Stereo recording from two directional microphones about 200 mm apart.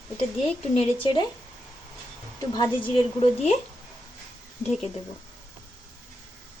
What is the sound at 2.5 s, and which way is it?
A woman's voice, 25° left (ahead or behind).